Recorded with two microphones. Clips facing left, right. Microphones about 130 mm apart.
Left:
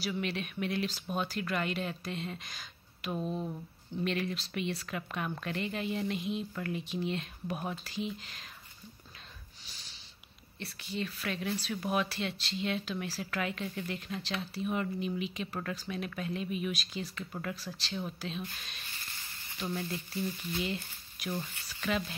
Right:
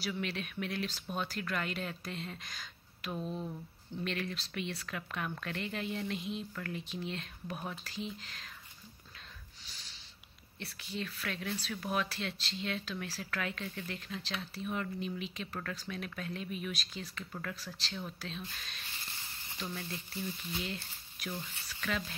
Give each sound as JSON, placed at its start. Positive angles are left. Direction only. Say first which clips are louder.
{"t": 0.0, "sound": "speech", "louder": "left 3 dB", "side_deg": 5}
{"t": 10.6, "sound": "speech", "louder": "left 3 dB", "side_deg": 0}